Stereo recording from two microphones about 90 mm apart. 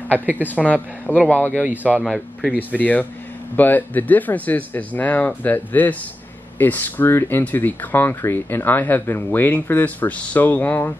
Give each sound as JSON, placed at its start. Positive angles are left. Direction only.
{"t": 0.4, "sound": "speech", "side_deg": 20}
{"t": 1.6, "sound": "speech", "side_deg": -15}
{"t": 2.0, "sound": "speech", "side_deg": 0}
{"t": 2.7, "sound": "speech", "side_deg": 15}